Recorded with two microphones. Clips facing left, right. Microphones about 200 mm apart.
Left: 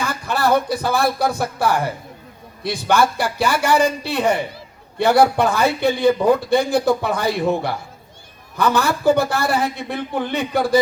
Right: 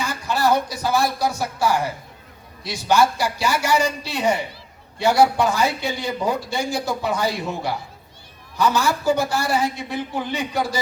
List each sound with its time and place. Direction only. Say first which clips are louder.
0.3 s a man's voice: left 2 dB; 60° left (ahead or behind)